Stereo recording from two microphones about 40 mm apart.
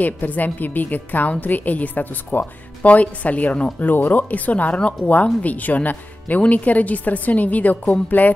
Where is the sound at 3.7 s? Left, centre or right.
Left.